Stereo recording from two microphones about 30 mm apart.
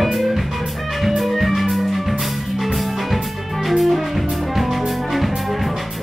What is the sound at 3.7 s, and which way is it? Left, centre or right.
Music, centre.